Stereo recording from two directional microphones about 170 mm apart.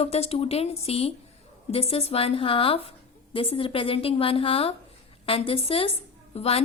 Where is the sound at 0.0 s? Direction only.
35° left (ahead or behind).